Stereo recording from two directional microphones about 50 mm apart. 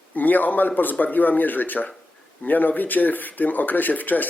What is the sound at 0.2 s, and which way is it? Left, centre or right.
Speech, left.